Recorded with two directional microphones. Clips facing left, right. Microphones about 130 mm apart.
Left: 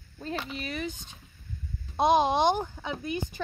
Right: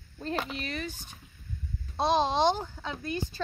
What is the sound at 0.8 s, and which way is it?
Speech, 20° left (ahead or behind).